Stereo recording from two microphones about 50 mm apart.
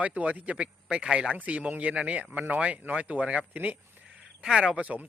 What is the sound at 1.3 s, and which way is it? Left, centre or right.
Speech, right.